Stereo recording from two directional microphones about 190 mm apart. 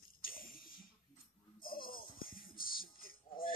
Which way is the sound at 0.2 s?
50° left (ahead or behind).